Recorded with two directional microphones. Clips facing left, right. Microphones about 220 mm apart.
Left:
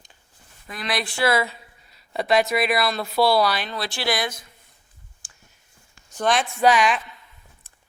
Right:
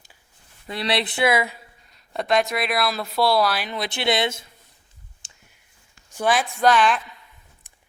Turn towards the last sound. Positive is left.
turn(degrees=-15)  # may be behind; listen again after turning